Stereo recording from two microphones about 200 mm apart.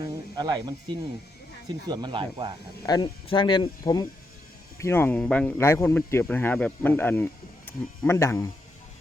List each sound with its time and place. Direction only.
0.0 s speech: 20° right (ahead or behind)
2.8 s speech: 20° left (ahead or behind)